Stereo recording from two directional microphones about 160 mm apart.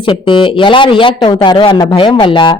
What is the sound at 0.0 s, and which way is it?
Speech, 30° left (ahead or behind).